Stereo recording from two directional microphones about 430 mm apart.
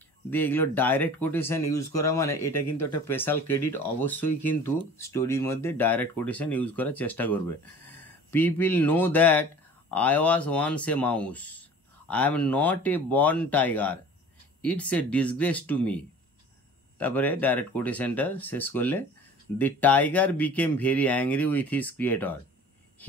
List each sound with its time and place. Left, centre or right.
0.3 s speech: centre
4.1 s speech: left
4.4 s speech: centre
17.0 s speech: centre